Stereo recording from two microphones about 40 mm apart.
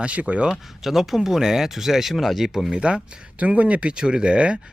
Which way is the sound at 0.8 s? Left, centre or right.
Centre.